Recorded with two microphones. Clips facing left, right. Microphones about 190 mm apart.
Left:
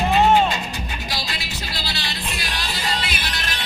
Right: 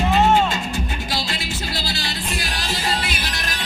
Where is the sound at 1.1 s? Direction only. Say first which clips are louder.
Right 4 dB; 50° right (ahead or behind).